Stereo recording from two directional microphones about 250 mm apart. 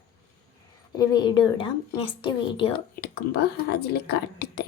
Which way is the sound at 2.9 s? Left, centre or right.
Left.